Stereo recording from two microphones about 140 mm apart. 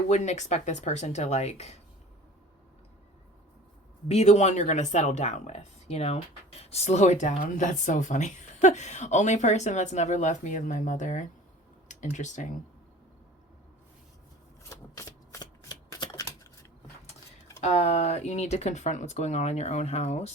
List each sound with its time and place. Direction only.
0.1 s speech: 55° left (ahead or behind)
4.1 s speech: 50° left (ahead or behind)
14.7 s shuffling cards: 20° left (ahead or behind)
17.6 s speech: 50° left (ahead or behind)